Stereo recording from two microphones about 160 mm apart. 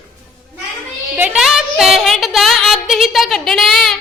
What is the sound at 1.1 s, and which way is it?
Speech, 5° right (ahead or behind).